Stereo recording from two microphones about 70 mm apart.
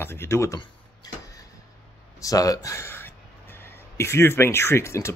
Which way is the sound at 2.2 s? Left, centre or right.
Left.